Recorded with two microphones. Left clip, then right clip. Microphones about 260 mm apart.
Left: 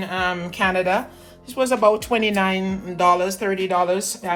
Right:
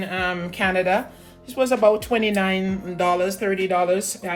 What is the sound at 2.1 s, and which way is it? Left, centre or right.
Speech, centre.